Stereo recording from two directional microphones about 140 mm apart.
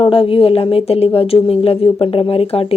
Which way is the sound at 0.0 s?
40° left (ahead or behind).